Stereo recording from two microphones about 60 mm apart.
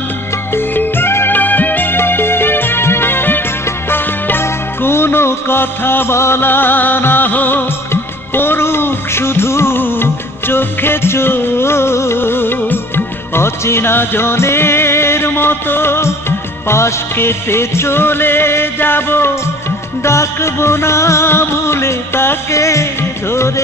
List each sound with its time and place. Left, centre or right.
0.6 s music: left
22.6 s music: left